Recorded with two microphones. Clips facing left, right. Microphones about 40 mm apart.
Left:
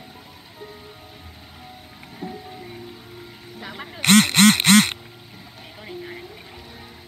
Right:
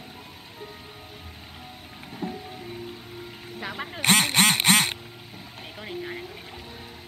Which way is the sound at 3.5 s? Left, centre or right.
Centre.